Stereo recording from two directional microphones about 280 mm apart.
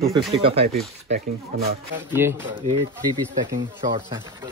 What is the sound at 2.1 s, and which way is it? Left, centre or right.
Speech, centre.